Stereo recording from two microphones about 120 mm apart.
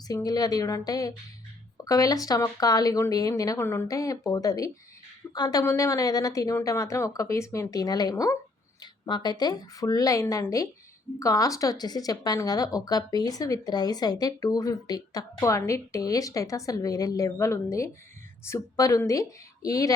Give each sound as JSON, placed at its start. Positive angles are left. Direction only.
{"t": 0.1, "sound": "a woman's voice", "side_deg": 30}
{"t": 8.8, "sound": "a woman's voice", "side_deg": 35}